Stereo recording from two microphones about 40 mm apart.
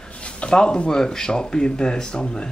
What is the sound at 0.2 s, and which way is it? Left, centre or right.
Speech, left.